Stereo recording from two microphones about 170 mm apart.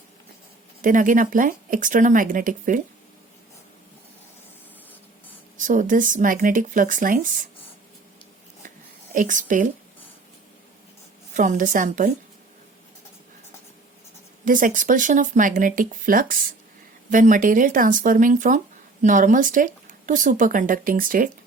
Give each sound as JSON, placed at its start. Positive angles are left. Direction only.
{"t": 0.8, "sound": "speech", "side_deg": -50}
{"t": 5.5, "sound": "speech", "side_deg": -50}
{"t": 9.1, "sound": "speech", "side_deg": -50}
{"t": 11.3, "sound": "speech", "side_deg": -50}
{"t": 14.4, "sound": "speech", "side_deg": -50}